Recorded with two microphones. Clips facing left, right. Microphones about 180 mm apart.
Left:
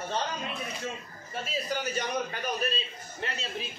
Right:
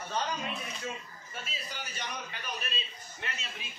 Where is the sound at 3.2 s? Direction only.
35° left (ahead or behind).